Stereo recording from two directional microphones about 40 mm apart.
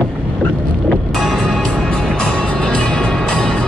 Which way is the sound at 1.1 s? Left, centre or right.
Centre.